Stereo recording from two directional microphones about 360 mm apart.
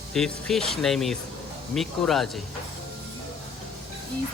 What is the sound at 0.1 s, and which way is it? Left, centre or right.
Speech, centre.